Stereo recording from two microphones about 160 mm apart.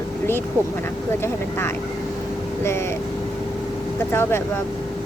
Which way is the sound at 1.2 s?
15° left (ahead or behind).